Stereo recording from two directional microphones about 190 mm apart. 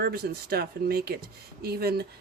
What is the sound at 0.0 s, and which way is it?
A woman's voice, 55° right (ahead or behind).